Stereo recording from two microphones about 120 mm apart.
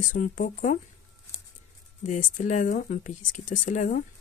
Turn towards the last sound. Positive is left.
turn(degrees=90)